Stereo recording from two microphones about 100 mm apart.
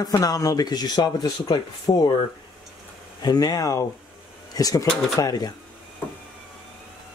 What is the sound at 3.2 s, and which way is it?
Speech, 40° left (ahead or behind).